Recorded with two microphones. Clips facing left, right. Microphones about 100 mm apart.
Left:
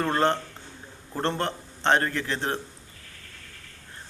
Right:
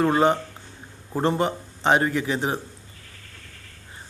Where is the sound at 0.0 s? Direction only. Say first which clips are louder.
Right 4 dB; 10° right (ahead or behind).